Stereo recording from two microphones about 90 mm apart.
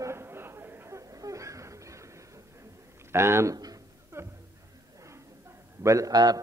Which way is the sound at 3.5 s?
45° right (ahead or behind).